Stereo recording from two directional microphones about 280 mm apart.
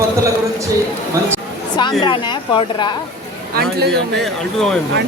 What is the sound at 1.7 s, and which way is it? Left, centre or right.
A woman's voice, centre.